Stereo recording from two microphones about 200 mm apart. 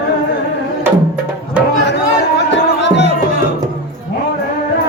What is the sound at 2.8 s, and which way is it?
Music, 60° left (ahead or behind).